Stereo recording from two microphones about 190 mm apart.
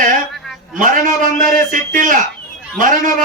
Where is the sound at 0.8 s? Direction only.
45° right (ahead or behind).